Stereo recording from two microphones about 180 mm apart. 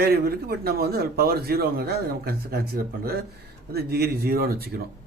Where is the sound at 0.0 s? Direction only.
60° right (ahead or behind).